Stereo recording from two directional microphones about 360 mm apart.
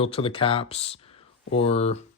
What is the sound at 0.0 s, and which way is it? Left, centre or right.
Speech, centre.